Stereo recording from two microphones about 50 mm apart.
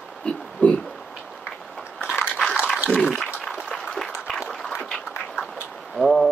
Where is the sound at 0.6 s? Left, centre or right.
Left.